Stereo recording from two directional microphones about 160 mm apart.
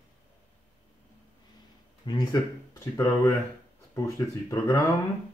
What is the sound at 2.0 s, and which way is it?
Speech, 25° left (ahead or behind).